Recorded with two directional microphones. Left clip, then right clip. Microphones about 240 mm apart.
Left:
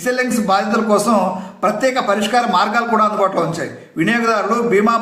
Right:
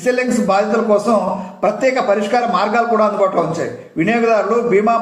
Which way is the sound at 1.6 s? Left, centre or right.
Centre.